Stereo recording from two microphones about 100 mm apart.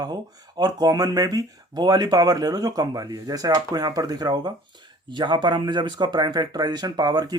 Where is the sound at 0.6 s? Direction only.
40° right (ahead or behind).